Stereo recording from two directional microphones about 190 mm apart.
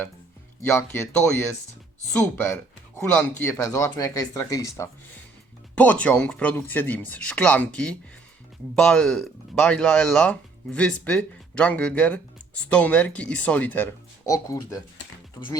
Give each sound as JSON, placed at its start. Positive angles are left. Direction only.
{"t": 0.6, "sound": "speech", "side_deg": 10}
{"t": 3.0, "sound": "speech", "side_deg": 10}